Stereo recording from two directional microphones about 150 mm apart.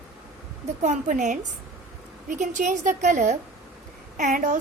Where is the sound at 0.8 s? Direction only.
55° right (ahead or behind).